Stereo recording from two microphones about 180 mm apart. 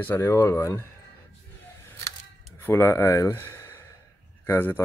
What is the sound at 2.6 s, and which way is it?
Speech, 15° left (ahead or behind).